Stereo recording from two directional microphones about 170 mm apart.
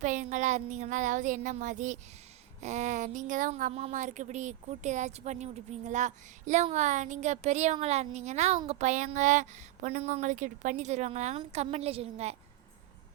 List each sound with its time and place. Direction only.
0.0 s speech: 45° right (ahead or behind)